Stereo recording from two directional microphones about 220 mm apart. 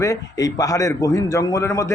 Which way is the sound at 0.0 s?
15° left (ahead or behind).